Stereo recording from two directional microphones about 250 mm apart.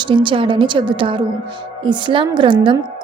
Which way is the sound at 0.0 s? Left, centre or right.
Centre.